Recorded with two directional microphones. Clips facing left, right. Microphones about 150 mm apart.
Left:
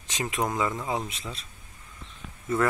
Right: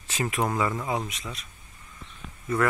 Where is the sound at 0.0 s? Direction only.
15° left (ahead or behind).